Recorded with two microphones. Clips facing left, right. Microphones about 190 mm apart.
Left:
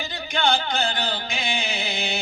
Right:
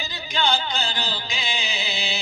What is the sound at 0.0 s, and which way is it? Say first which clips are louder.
Music: left 2 dB; 50° left (ahead or behind).